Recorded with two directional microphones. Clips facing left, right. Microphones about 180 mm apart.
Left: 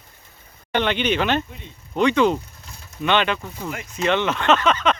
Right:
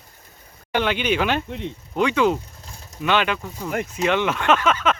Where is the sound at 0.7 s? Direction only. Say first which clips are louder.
Even; 10° right (ahead or behind).